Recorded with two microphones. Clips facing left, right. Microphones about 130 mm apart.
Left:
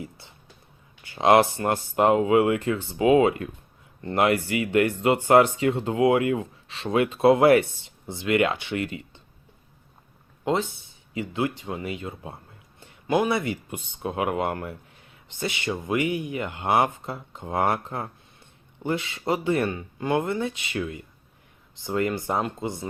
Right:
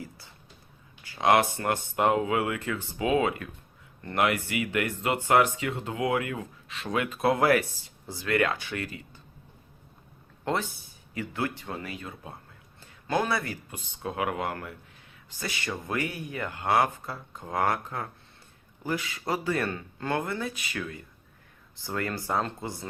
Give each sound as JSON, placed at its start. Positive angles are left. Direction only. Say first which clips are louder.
{"t": 1.0, "sound": "speech", "louder": "left 5 dB", "side_deg": 25}
{"t": 10.4, "sound": "speech", "louder": "left 5 dB", "side_deg": 20}